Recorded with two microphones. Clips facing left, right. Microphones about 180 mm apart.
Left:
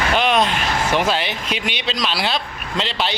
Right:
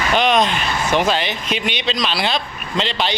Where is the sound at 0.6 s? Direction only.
90° left.